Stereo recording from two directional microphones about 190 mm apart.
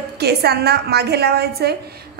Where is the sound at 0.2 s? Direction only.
55° right (ahead or behind).